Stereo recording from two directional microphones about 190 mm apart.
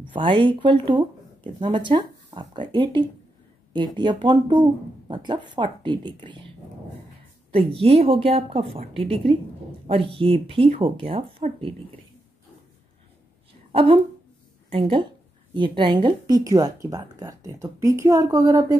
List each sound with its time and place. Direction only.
0.1 s speech: 25° right (ahead or behind)
7.5 s a woman's voice: 30° right (ahead or behind)
13.7 s a sound: 30° right (ahead or behind)
14.7 s speech: 25° right (ahead or behind)